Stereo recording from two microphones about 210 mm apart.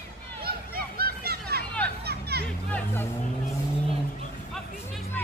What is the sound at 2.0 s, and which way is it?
Music, 50° right (ahead or behind).